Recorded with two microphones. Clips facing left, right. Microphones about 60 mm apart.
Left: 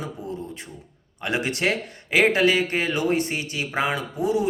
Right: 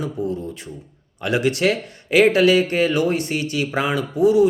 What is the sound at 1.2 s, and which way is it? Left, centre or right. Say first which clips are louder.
Speech: right 6 dB; left.